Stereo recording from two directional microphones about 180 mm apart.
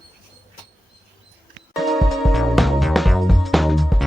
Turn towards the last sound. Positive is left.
turn(degrees=0)  # may be behind; listen again after turning